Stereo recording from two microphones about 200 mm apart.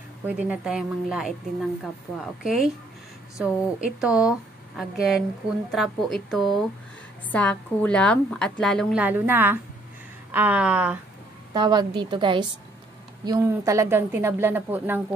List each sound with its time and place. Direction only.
0.3 s a woman's voice: 5° right (ahead or behind)
2.4 s a woman's voice: centre (ahead or behind)
9.0 s speech: 10° right (ahead or behind)
11.5 s a woman's voice: 20° right (ahead or behind)